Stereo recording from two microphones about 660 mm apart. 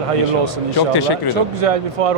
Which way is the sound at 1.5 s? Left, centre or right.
Right.